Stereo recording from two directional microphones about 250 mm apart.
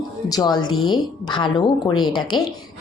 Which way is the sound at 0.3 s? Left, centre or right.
Centre.